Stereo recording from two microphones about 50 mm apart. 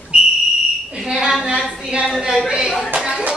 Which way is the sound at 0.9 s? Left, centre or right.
Centre.